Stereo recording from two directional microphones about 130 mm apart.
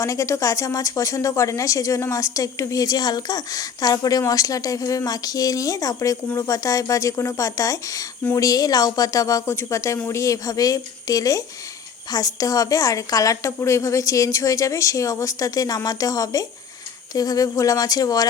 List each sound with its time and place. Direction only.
0.0 s a woman's voice: 25° left (ahead or behind)